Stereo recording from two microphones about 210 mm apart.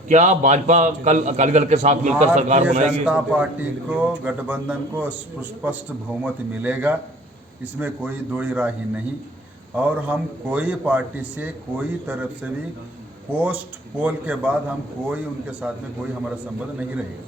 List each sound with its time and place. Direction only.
0.1 s a man's voice: 35° right (ahead or behind)
3.1 s a man's voice: 5° right (ahead or behind)
9.7 s a man's voice: 5° right (ahead or behind)